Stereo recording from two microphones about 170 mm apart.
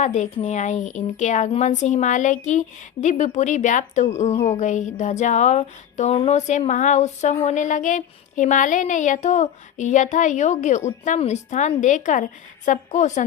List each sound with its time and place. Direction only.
0.0 s speech: 45° left (ahead or behind)